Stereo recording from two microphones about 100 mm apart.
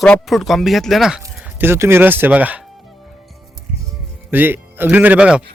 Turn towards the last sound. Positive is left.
turn(degrees=-10)  # may be behind; listen again after turning